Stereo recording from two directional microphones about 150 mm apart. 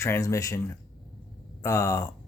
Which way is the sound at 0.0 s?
20° left (ahead or behind).